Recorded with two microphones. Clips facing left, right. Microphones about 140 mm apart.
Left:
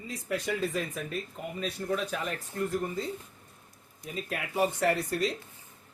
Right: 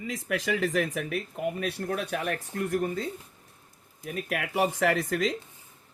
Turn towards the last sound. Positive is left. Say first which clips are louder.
# right 2 dB
turn(degrees=-90)